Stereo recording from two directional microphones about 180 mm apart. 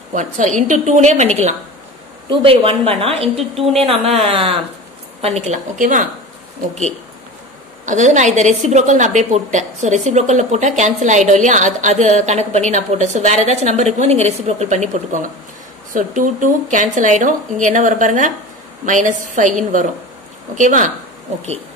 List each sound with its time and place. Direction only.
0.1 s a woman's voice: 45° right (ahead or behind)
4.3 s a woman's voice: 30° right (ahead or behind); by 6.0 s 45° right (ahead or behind)
7.8 s a woman's voice: 45° right (ahead or behind)